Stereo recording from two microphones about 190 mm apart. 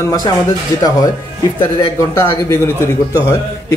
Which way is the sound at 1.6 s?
20° left (ahead or behind).